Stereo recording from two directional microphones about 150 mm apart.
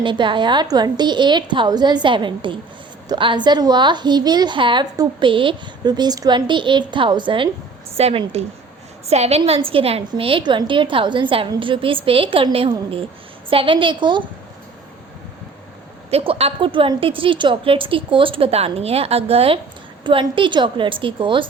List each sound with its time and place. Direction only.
0.0 s a woman's voice: 35° right (ahead or behind)
16.0 s a woman's voice: 40° right (ahead or behind)